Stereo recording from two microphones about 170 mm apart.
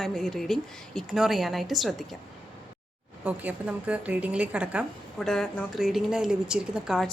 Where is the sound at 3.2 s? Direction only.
10° right (ahead or behind).